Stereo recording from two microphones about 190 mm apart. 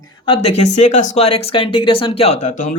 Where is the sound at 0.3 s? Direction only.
35° left (ahead or behind).